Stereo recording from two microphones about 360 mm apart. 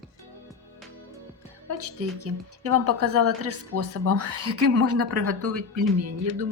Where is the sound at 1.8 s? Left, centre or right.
Right.